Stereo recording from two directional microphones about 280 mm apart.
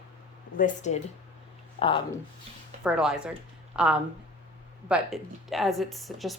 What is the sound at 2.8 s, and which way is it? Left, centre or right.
A woman's voice, centre.